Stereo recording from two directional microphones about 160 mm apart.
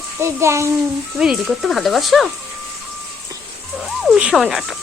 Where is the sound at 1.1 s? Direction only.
Centre (ahead or behind).